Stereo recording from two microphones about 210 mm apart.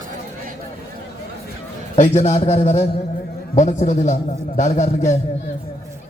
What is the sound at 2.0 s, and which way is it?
A man's voice, 35° left (ahead or behind).